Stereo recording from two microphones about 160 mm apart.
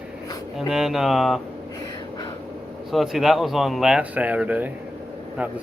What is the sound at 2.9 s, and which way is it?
Speech, centre (ahead or behind).